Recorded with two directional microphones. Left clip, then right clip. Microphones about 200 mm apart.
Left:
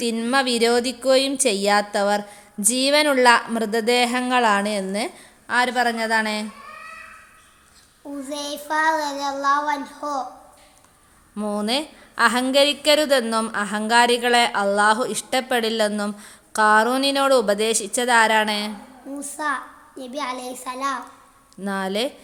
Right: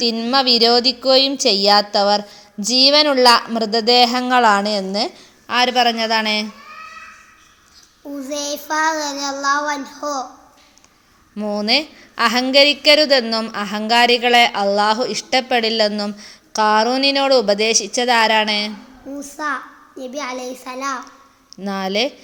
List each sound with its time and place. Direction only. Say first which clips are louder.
0.0 s a woman's voice: right 4 dB; centre (ahead or behind)
8.3 s child singing: right 4 dB; 20° right (ahead or behind)
11.3 s a woman's voice: right 6 dB; centre (ahead or behind)
19.2 s a child's voice: right 2 dB; 15° right (ahead or behind)
21.6 s a woman's voice: right 4 dB; centre (ahead or behind)